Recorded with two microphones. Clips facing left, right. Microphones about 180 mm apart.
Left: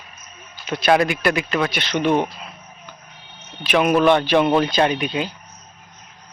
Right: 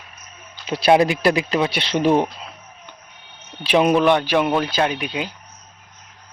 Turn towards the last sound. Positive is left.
turn(degrees=-10)  # may be behind; listen again after turning